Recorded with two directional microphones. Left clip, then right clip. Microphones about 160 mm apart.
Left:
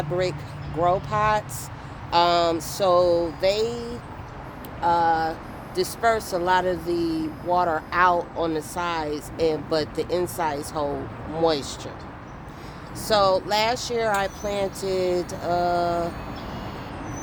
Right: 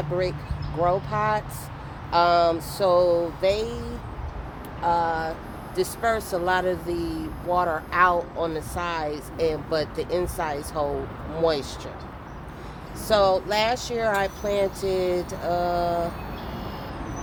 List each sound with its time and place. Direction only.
0.8 s speech: 45° left (ahead or behind)
13.1 s speech: 35° left (ahead or behind)